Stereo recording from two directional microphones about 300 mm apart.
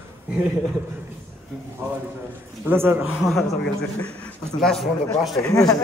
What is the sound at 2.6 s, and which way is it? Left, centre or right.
Speech, centre.